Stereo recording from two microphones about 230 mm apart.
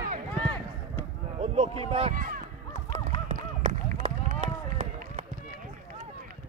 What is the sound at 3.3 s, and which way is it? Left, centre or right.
Run, right.